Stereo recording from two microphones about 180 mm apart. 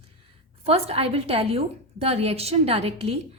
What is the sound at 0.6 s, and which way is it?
A woman's voice, 35° right (ahead or behind).